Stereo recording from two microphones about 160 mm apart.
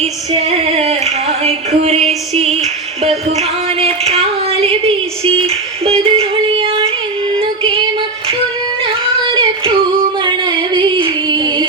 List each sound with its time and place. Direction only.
0.0 s female singing: 40° right (ahead or behind)
3.0 s a sound: 40° right (ahead or behind)
5.8 s music: 35° right (ahead or behind)
7.3 s female singing: 35° right (ahead or behind)
8.8 s a sound: 30° right (ahead or behind)
10.2 s female singing: 30° right (ahead or behind)